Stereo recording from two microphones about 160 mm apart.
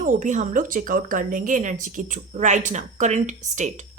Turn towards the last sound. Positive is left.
turn(degrees=-50)  # may be behind; listen again after turning